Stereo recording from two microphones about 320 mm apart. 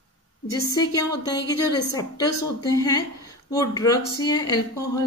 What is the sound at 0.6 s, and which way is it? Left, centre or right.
A woman's voice, centre.